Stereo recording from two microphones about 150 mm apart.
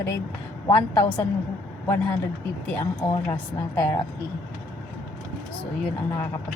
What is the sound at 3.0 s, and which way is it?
Speech, 25° left (ahead or behind).